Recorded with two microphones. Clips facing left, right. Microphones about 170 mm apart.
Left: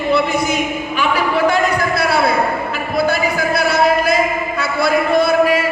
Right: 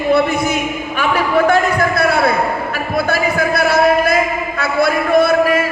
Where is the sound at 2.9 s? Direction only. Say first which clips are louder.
Even; 55° right (ahead or behind).